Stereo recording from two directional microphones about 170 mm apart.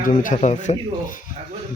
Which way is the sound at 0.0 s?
50° left (ahead or behind).